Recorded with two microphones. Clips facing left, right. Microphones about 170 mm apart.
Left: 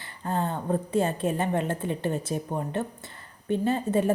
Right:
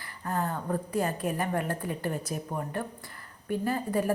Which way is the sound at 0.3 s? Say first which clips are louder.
Left 3 dB; 25° left (ahead or behind).